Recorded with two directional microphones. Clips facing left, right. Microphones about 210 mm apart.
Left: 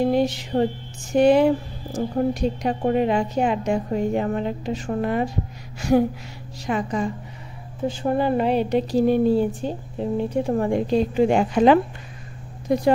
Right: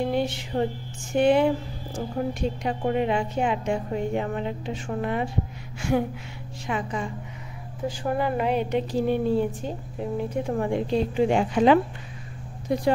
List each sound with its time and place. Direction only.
0.0 s a sound: 40° left (ahead or behind)
1.1 s speech: 40° left (ahead or behind)
2.6 s speech: 40° left (ahead or behind)
7.8 s speech: 30° left (ahead or behind); by 11.8 s 45° left (ahead or behind)